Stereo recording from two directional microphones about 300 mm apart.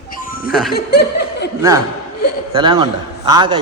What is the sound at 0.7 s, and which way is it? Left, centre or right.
Speech, left.